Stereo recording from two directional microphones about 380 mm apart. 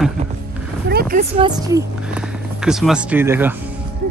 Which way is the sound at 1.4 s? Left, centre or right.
Centre.